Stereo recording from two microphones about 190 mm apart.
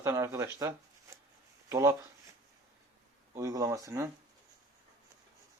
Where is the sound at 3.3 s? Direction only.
15° right (ahead or behind).